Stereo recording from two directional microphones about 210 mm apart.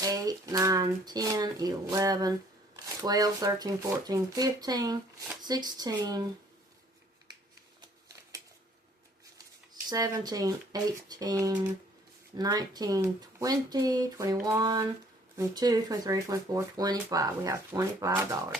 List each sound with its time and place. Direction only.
0.0 s speech: 15° right (ahead or behind)
9.9 s speech: 15° right (ahead or behind)